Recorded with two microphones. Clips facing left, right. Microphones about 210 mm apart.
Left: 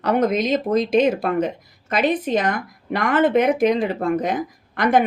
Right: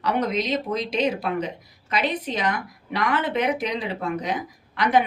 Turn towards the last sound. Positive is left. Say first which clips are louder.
# left 3 dB
turn(degrees=50)  # may be behind; listen again after turning